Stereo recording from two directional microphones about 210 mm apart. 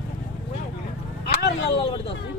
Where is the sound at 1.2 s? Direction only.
50° left (ahead or behind).